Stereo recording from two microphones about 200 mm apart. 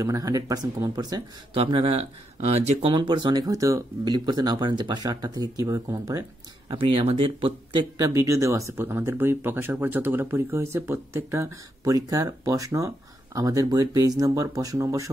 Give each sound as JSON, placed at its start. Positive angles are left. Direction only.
{"t": 0.0, "sound": "speech", "side_deg": -15}